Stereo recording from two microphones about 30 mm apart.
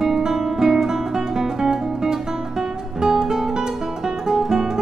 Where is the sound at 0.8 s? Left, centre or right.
Centre.